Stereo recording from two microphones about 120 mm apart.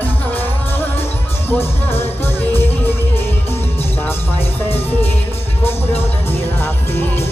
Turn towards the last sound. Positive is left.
turn(degrees=20)  # may be behind; listen again after turning